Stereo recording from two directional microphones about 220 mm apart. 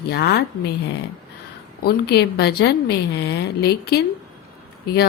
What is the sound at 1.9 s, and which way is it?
Speech, 50° left (ahead or behind).